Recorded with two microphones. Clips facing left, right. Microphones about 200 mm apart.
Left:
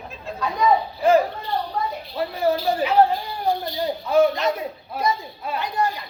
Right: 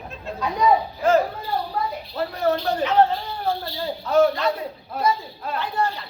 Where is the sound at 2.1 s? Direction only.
5° left (ahead or behind).